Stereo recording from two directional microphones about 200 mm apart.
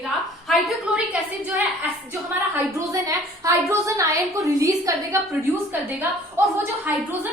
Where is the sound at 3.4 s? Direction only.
15° right (ahead or behind).